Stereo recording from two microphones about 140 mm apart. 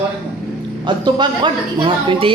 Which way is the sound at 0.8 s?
35° right (ahead or behind).